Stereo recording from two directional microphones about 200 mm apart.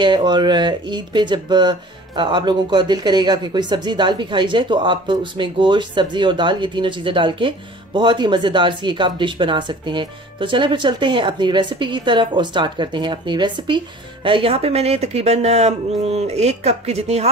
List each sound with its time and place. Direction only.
0.0 s speech: 20° right (ahead or behind)